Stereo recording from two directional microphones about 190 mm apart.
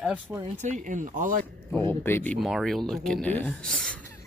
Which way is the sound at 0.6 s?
40° right (ahead or behind).